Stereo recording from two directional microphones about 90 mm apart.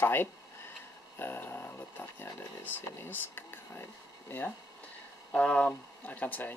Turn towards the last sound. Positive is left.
turn(degrees=20)  # may be behind; listen again after turning